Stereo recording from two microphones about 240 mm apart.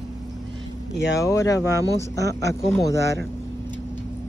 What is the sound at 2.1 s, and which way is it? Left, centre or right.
Speech, right.